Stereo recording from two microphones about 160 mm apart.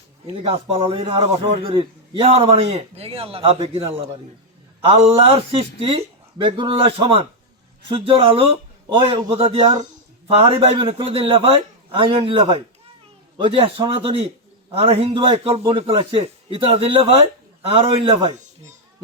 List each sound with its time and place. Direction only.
0.3 s a man's voice: 35° right (ahead or behind)
4.9 s a man's voice: 35° right (ahead or behind)